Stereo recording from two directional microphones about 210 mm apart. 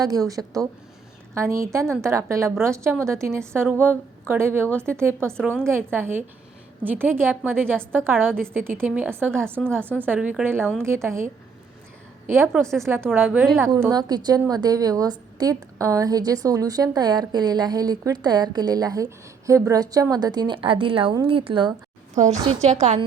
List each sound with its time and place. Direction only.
0.0 s a woman's voice: 15° right (ahead or behind)
12.3 s a woman's voice: 10° right (ahead or behind); by 23.0 s 35° right (ahead or behind)